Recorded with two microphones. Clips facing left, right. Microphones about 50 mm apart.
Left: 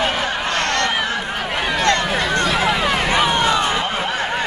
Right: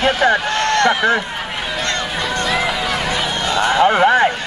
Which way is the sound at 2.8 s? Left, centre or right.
Left.